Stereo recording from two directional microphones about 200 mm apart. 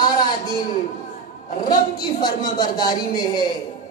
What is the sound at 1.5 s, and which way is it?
A man's voice, 20° left (ahead or behind).